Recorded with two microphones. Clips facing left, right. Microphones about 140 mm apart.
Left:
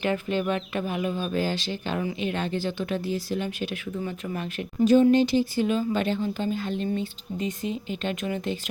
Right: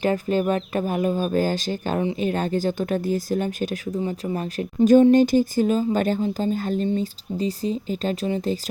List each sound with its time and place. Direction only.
0.0 s speech: 40° right (ahead or behind)
4.0 s speech: 30° right (ahead or behind)